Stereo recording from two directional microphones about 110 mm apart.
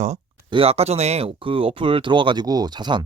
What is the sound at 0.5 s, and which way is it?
Speech, 65° right (ahead or behind).